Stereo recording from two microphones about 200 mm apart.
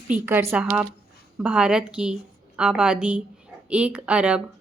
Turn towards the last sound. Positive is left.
turn(degrees=-5)  # may be behind; listen again after turning